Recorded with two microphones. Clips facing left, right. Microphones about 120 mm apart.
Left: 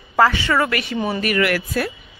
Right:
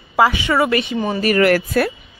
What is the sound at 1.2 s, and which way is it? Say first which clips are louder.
Speech: right 7 dB; 40° right (ahead or behind).